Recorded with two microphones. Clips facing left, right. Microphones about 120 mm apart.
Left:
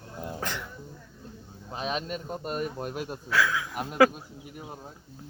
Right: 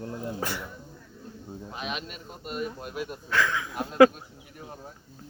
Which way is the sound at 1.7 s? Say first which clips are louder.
Left 5 dB; 35° left (ahead or behind).